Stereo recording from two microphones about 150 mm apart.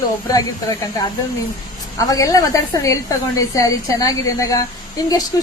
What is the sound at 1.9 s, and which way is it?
Speech, 25° left (ahead or behind).